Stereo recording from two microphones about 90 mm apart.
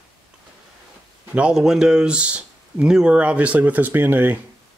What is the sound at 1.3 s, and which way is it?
Speech, 10° right (ahead or behind).